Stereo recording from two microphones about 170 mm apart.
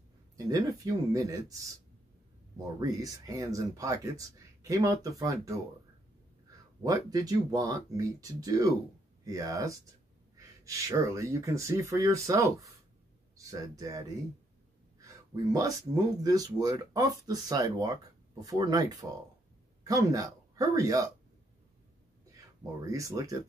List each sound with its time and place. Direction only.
0.5 s speech: 20° right (ahead or behind)
2.8 s speech: 20° right (ahead or behind)
6.8 s speech: 20° right (ahead or behind)
22.8 s speech: 20° right (ahead or behind)